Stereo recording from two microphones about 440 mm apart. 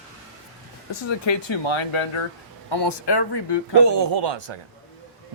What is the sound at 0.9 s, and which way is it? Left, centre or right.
Speech, left.